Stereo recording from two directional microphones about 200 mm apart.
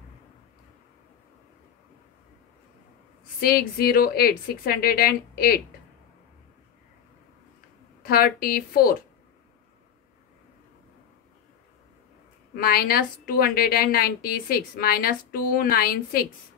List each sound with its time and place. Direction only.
3.3 s a woman's voice: 50° left (ahead or behind)
8.0 s a woman's voice: 50° left (ahead or behind)
12.5 s a woman's voice: 50° left (ahead or behind)